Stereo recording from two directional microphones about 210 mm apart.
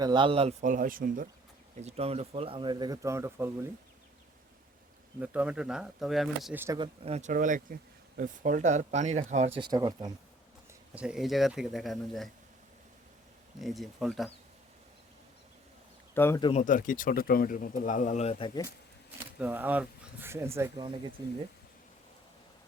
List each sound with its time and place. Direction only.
0.0 s speech: 20° right (ahead or behind); by 1.3 s 40° right (ahead or behind)
1.8 s speech: 30° right (ahead or behind); by 3.7 s 10° right (ahead or behind)
5.2 s speech: 5° right (ahead or behind)
6.7 s speech: 25° right (ahead or behind)
9.6 s speech: 20° right (ahead or behind)
10.9 s speech: 5° right (ahead or behind)
13.6 s speech: centre (ahead or behind)
16.1 s speech: 10° left (ahead or behind)
16.4 s speech: 30° left (ahead or behind)
19.4 s speech: 10° right (ahead or behind)